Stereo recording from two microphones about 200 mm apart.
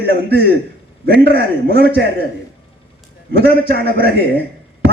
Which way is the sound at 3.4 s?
50° right (ahead or behind).